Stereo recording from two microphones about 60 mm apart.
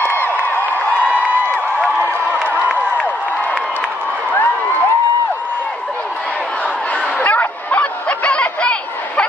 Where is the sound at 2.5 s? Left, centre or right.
Right.